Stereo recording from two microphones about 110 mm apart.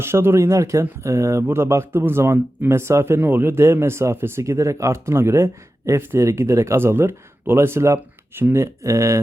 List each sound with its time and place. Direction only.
0.0 s speech: 20° right (ahead or behind)